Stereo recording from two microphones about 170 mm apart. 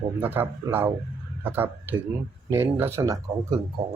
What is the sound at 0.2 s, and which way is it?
Speech, 10° right (ahead or behind).